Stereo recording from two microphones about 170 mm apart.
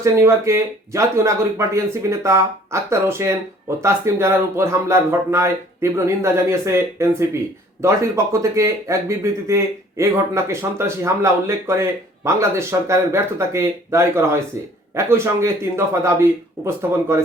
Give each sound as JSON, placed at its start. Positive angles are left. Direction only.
{"t": 0.0, "sound": "speech", "side_deg": -15}